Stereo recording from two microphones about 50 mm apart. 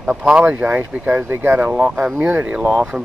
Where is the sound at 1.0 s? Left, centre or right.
Right.